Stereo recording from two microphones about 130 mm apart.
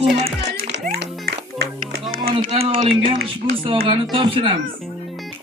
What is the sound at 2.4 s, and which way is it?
Speech, 55° right (ahead or behind).